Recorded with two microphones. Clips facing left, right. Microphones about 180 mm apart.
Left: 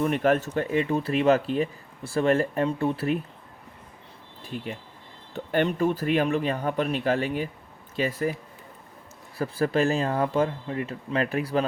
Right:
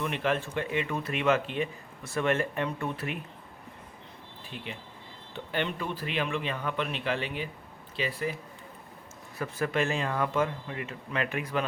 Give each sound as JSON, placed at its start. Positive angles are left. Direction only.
{"t": 0.0, "sound": "speech", "side_deg": 45}
{"t": 4.4, "sound": "speech", "side_deg": 40}
{"t": 9.4, "sound": "speech", "side_deg": 35}